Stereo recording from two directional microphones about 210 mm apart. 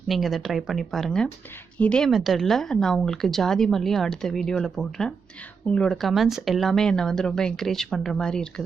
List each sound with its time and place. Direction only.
0.1 s a woman's voice: centre (ahead or behind)